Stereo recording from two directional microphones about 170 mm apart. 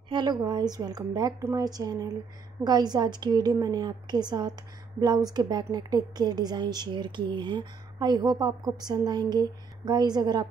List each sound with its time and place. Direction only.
0.1 s a woman's voice: 25° right (ahead or behind)